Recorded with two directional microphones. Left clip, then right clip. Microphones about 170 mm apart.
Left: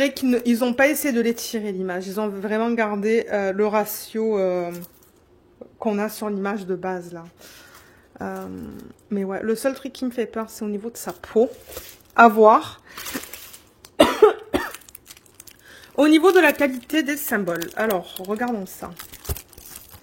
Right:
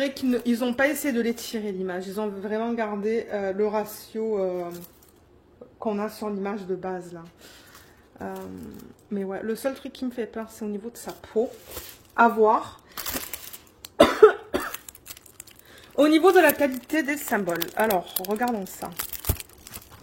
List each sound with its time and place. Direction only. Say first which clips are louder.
0.0 s speech: left 5 dB; 50° left (ahead or behind)
5.8 s speech: left 4 dB; 50° left (ahead or behind)
11.1 s a woman's voice: left 6 dB; 55° left (ahead or behind)
12.1 s speech: left 6 dB; 90° left
13.9 s cough: left 1 dB; 55° left (ahead or behind)
16.0 s speech: left 2 dB; 30° left (ahead or behind)